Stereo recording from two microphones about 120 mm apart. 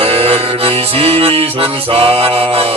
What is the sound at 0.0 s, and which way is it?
Music, 55° right (ahead or behind).